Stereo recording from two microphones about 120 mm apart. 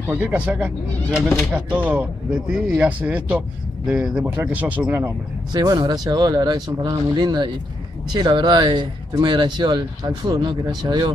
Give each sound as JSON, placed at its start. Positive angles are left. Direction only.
{"t": 0.1, "sound": "speech", "side_deg": -15}
{"t": 5.5, "sound": "speech", "side_deg": -35}